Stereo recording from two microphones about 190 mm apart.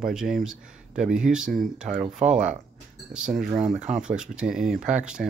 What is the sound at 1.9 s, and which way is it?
Speech, 45° right (ahead or behind).